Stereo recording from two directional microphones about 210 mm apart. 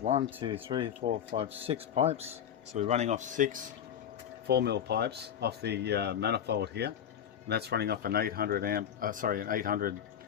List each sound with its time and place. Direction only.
0.0 s speech: 30° right (ahead or behind)
4.4 s speech: 50° right (ahead or behind)